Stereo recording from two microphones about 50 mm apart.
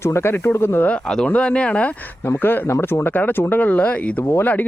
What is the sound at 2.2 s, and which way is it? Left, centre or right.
Speech, left.